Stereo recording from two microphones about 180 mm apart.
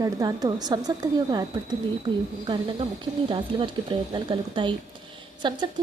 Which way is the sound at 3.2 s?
25° right (ahead or behind).